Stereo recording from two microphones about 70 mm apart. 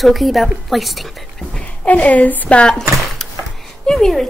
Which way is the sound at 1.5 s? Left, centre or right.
Left.